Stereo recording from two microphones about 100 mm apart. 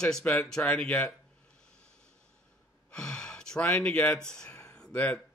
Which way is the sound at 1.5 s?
10° left (ahead or behind).